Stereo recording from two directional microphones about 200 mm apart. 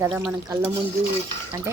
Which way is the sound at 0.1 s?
15° right (ahead or behind).